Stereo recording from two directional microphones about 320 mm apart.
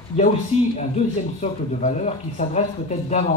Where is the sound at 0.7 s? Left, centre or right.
Left.